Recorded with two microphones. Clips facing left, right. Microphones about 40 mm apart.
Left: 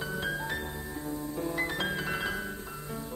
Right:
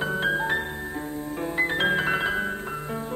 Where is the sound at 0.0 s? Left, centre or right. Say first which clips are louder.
Right 9 dB; right.